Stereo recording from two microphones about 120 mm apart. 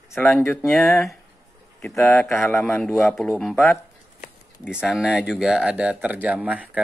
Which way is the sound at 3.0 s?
5° left (ahead or behind).